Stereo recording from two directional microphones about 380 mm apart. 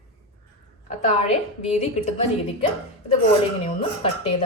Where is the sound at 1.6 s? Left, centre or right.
Centre.